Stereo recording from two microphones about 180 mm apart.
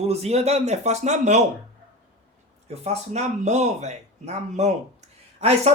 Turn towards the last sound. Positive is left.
turn(degrees=-35)  # may be behind; listen again after turning